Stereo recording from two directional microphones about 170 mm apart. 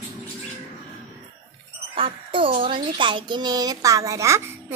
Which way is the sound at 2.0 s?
30° right (ahead or behind).